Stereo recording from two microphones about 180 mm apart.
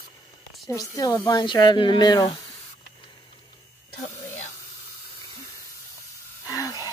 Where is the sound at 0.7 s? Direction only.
20° left (ahead or behind).